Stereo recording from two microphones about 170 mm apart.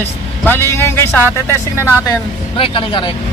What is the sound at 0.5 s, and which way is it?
Speech, 15° left (ahead or behind).